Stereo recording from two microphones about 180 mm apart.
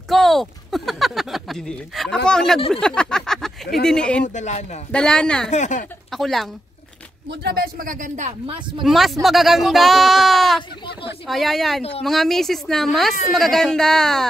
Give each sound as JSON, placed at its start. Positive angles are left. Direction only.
{"t": 0.1, "sound": "speech", "side_deg": 0}
{"t": 2.7, "sound": "a sound", "side_deg": 5}
{"t": 3.8, "sound": "speech", "side_deg": 5}
{"t": 4.2, "sound": "speech", "side_deg": 40}
{"t": 4.9, "sound": "speech", "side_deg": 5}
{"t": 5.5, "sound": "speech", "side_deg": 40}
{"t": 6.1, "sound": "speech", "side_deg": 0}
{"t": 7.2, "sound": "speech", "side_deg": -60}
{"t": 8.8, "sound": "speech", "side_deg": 0}